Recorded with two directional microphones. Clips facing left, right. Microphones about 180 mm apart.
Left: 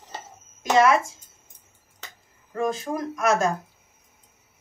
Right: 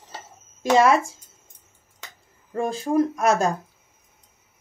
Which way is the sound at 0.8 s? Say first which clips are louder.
Right 1 dB; 30° right (ahead or behind).